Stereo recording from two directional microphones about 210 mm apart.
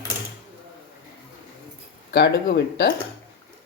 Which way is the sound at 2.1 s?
55° left (ahead or behind).